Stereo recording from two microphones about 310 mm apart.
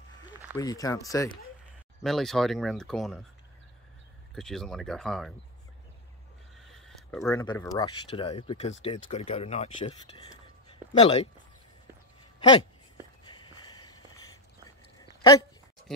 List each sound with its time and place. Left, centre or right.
0.6 s speech: centre
4.4 s speech: centre
6.6 s speech: centre
12.4 s speech: centre
13.2 s walk: centre